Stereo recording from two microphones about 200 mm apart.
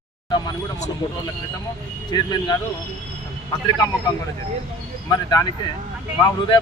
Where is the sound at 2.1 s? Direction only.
20° left (ahead or behind).